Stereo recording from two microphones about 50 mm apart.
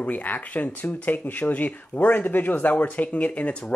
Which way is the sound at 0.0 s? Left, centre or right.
Left.